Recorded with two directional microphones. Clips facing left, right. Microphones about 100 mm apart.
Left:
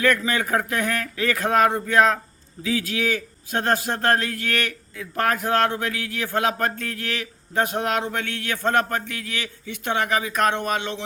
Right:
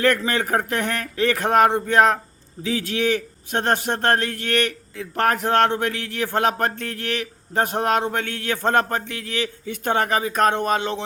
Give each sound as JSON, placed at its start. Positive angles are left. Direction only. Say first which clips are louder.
{"t": 0.0, "sound": "a man's voice", "louder": "right 1 dB", "side_deg": -35}